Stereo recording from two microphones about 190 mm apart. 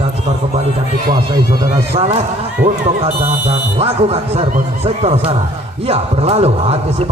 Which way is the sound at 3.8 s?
30° right (ahead or behind).